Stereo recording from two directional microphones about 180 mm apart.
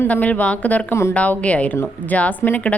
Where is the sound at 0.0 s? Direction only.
10° left (ahead or behind).